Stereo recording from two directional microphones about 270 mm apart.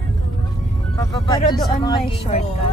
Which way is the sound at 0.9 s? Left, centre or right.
Centre.